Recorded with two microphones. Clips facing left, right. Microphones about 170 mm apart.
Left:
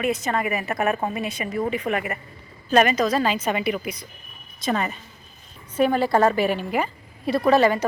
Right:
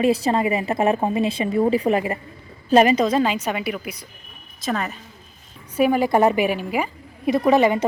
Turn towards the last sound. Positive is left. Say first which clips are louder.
# right 1 dB
turn(degrees=-20)  # may be behind; listen again after turning